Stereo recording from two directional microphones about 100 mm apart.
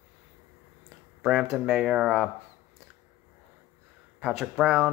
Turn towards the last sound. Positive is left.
turn(degrees=-5)  # may be behind; listen again after turning